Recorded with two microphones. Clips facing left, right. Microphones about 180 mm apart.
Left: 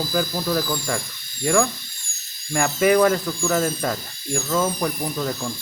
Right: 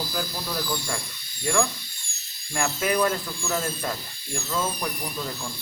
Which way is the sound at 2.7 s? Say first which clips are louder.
Left 8 dB; 90° left.